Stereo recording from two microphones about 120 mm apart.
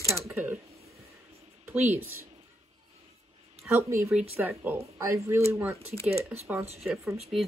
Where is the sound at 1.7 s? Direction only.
20° right (ahead or behind).